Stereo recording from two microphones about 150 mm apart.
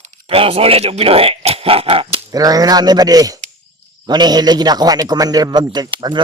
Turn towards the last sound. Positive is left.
turn(degrees=-30)  # may be behind; listen again after turning